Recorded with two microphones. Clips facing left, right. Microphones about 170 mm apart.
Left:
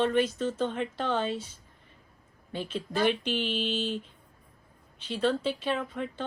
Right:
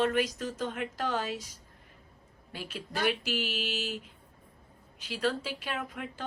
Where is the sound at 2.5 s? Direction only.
10° right (ahead or behind).